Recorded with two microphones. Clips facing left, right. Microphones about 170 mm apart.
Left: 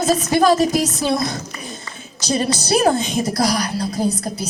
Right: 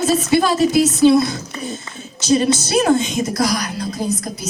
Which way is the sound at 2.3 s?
35° left (ahead or behind).